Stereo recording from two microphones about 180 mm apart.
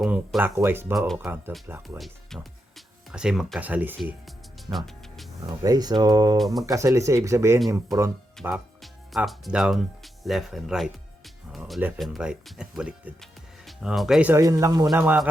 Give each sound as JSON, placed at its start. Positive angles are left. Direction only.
{"t": 0.0, "sound": "speech", "side_deg": 0}
{"t": 0.9, "sound": "speech", "side_deg": 0}
{"t": 1.6, "sound": "speech", "side_deg": -15}
{"t": 2.0, "sound": "speech", "side_deg": 0}
{"t": 4.3, "sound": "music", "side_deg": 0}
{"t": 5.6, "sound": "speech", "side_deg": -20}
{"t": 6.3, "sound": "speech", "side_deg": 0}
{"t": 6.7, "sound": "speech", "side_deg": -15}
{"t": 7.9, "sound": "speech", "side_deg": 0}